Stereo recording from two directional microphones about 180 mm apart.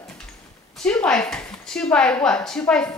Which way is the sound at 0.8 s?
5° left (ahead or behind).